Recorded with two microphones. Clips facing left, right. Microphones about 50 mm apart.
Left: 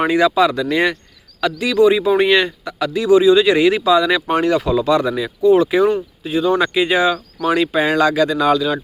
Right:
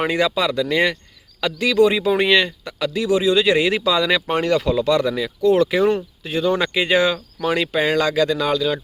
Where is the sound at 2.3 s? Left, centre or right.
Left.